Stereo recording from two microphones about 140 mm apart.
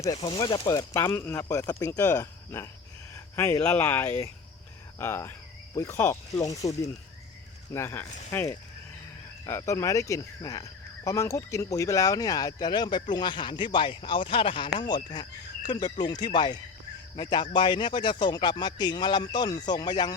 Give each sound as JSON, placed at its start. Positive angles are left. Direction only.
{"t": 0.0, "sound": "speech", "side_deg": 30}